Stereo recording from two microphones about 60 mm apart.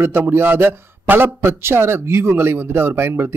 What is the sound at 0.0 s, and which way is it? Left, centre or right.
Speech, right.